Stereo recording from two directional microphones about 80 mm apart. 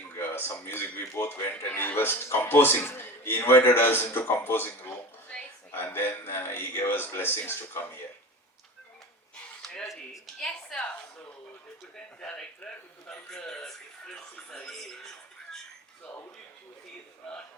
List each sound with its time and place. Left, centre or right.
0.2 s a man's voice: left
9.6 s a sound: centre
10.4 s a woman's voice: centre
11.9 s a man's voice: centre
14.3 s a man's voice: centre
14.7 s speech: centre